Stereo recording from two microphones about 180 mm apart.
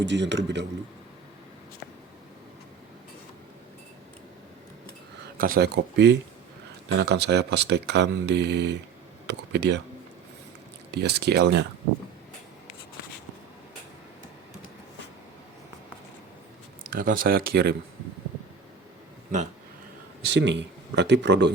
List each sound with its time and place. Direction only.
0.0 s speech: 75° right (ahead or behind)
5.4 s speech: 55° right (ahead or behind)
10.9 s speech: 65° right (ahead or behind)
16.9 s speech: 55° right (ahead or behind)
20.2 s speech: 75° right (ahead or behind)